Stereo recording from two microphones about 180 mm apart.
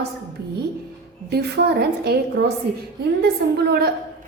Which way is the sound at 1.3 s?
60° right (ahead or behind).